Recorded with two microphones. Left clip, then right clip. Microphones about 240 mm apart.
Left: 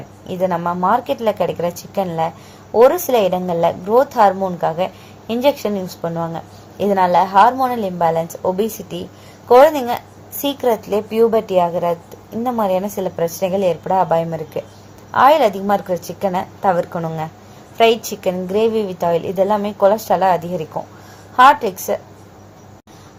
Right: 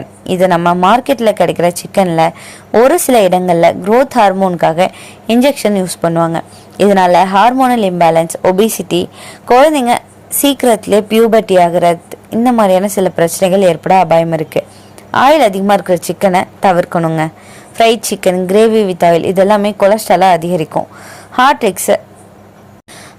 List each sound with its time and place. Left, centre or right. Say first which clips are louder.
0.3 s a woman's voice: right 9 dB; right